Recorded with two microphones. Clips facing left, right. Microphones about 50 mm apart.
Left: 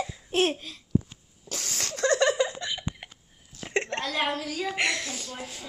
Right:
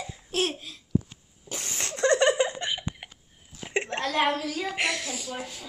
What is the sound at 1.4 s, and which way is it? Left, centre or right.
Fart, right.